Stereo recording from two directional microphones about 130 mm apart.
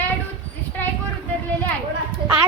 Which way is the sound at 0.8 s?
15° left (ahead or behind).